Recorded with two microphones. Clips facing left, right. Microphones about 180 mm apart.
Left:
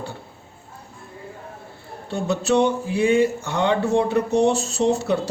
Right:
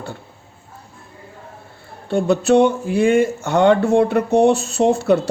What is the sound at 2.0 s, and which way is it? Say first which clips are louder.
Speech: right 6 dB; 55° right (ahead or behind).